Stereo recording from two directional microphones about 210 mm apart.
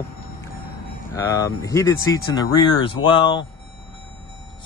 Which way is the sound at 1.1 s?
15° left (ahead or behind).